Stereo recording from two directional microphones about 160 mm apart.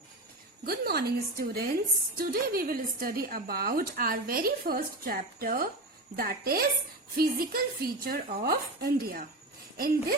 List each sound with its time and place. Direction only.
0.6 s a woman's voice: 75° right (ahead or behind)